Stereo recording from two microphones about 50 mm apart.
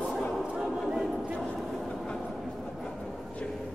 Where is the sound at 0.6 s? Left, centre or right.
Centre.